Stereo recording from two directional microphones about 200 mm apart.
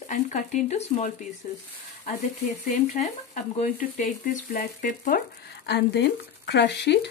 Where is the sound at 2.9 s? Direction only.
35° left (ahead or behind).